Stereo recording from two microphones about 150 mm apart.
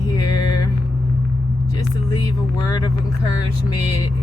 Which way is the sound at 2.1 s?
25° left (ahead or behind).